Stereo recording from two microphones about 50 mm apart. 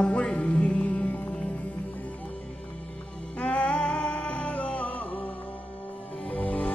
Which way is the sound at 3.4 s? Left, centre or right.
Left.